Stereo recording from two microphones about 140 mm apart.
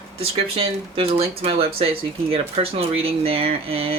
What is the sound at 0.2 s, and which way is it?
Speech, 45° right (ahead or behind).